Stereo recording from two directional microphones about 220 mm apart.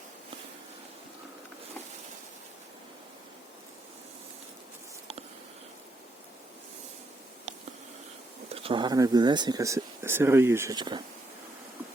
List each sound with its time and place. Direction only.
8.5 s speech: 25° right (ahead or behind)